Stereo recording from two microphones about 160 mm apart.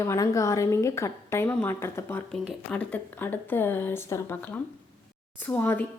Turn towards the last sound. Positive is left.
turn(degrees=10)  # may be behind; listen again after turning